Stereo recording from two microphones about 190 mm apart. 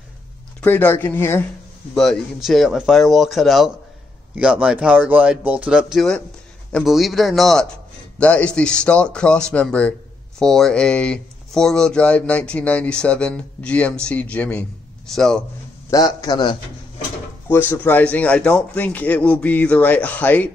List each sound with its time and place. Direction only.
0.6 s a man's voice: 10° left (ahead or behind)
2.0 s speech: centre (ahead or behind)
15.9 s a man's voice: 20° left (ahead or behind)
17.5 s a man's voice: 10° left (ahead or behind)